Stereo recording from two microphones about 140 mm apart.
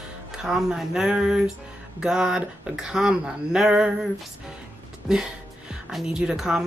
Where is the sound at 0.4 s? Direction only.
5° right (ahead or behind).